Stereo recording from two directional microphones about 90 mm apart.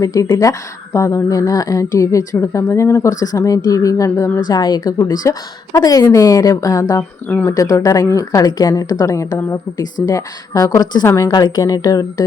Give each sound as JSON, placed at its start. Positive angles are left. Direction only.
{"t": 0.0, "sound": "a woman's voice", "side_deg": 40}
{"t": 7.3, "sound": "speech", "side_deg": 20}
{"t": 7.5, "sound": "a woman's voice", "side_deg": 40}
{"t": 11.3, "sound": "speech", "side_deg": 50}